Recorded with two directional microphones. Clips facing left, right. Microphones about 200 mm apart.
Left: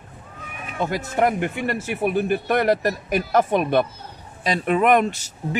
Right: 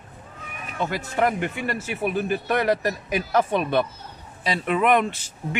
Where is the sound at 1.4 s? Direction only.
50° left (ahead or behind).